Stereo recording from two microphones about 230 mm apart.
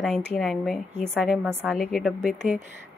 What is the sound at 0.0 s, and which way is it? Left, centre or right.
A woman's voice, centre.